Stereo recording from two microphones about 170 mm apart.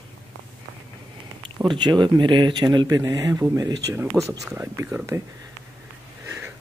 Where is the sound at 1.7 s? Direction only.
25° right (ahead or behind).